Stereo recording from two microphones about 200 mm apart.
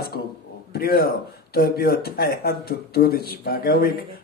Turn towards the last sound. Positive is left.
turn(degrees=50)  # may be behind; listen again after turning